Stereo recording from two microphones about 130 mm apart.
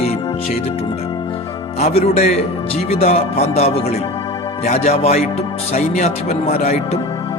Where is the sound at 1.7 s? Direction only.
55° left (ahead or behind).